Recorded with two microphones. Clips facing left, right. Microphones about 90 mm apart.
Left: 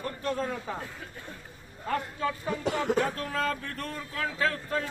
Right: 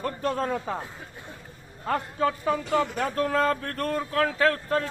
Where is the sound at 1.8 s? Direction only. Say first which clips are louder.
Right 5 dB; 50° right (ahead or behind).